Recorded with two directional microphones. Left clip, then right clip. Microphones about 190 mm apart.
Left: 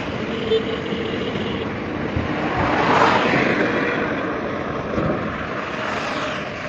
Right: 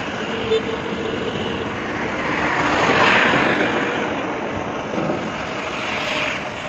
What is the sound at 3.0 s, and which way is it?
Vehicle, 55° left (ahead or behind).